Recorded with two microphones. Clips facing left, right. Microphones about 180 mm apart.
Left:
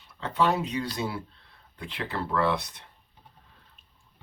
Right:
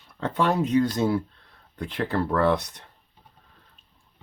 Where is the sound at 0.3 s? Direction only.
50° right (ahead or behind).